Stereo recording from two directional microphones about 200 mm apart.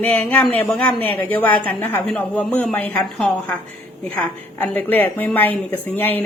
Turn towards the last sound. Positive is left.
turn(degrees=10)  # may be behind; listen again after turning